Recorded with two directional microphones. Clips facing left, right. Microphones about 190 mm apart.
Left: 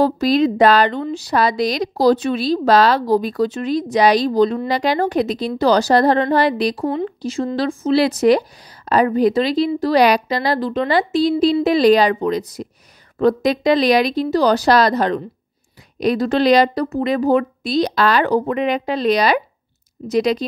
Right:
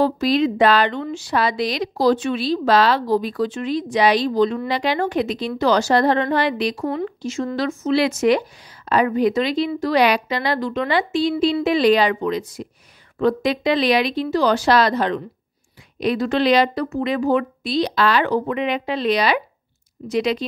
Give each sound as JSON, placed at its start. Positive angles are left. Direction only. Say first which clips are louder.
{"t": 0.0, "sound": "a woman's voice", "louder": "left 3 dB", "side_deg": 40}